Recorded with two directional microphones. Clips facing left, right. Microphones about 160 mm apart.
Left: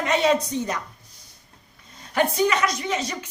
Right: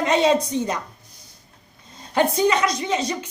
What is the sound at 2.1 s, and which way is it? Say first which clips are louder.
A woman's voice: right 2 dB; 25° right (ahead or behind).